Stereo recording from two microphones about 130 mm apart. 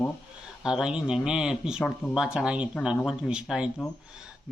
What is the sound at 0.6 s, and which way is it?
Speech, 5° right (ahead or behind).